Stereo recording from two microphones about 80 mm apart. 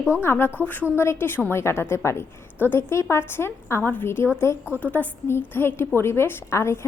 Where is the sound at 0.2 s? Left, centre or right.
Left.